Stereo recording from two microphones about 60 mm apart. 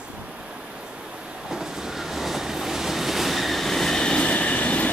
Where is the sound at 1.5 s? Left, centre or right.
Centre.